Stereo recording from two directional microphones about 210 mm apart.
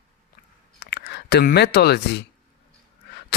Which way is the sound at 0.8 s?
50° left (ahead or behind).